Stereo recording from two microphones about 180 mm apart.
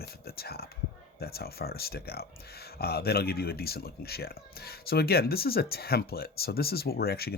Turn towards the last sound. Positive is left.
turn(degrees=60)  # may be behind; listen again after turning